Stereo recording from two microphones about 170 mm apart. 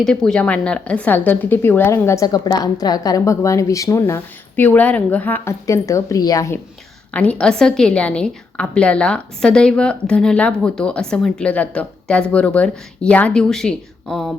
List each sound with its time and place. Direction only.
0.0 s a woman's voice: 5° left (ahead or behind); by 6.6 s 20° left (ahead or behind)
7.1 s a woman's voice: 5° left (ahead or behind)